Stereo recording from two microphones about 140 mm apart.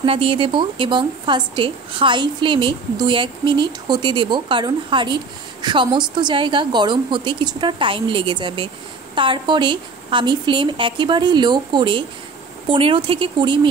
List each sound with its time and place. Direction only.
0.0 s speech: 40° right (ahead or behind)